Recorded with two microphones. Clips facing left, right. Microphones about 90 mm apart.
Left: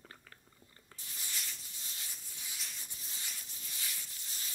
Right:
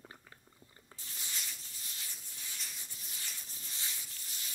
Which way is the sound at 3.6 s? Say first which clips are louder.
Even; 30° right (ahead or behind).